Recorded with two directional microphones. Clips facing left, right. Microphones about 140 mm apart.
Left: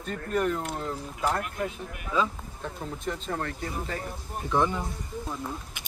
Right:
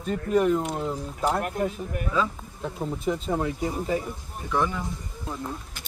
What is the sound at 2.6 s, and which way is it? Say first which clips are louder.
Speech: right 6 dB; 10° right (ahead or behind).